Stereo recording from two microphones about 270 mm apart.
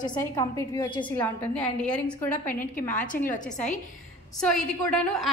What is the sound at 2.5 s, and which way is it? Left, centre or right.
A woman's voice, left.